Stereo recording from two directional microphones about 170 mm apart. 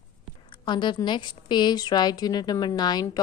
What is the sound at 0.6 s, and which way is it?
A woman's voice, 25° left (ahead or behind).